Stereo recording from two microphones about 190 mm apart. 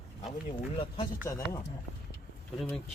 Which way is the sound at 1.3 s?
15° left (ahead or behind).